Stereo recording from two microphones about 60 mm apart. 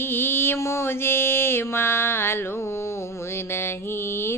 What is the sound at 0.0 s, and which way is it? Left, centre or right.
Mantra, left.